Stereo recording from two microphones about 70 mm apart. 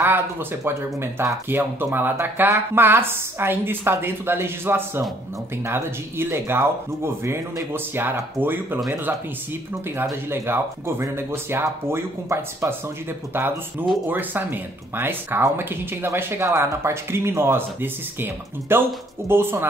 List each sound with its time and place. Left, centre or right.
0.0 s speech: right
7.7 s speech: right
10.3 s speech: right